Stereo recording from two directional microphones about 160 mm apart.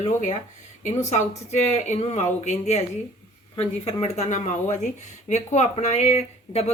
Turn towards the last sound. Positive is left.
turn(degrees=40)  # may be behind; listen again after turning